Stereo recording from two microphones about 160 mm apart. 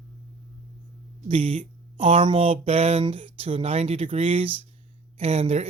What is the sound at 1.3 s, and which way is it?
Speech, 35° right (ahead or behind).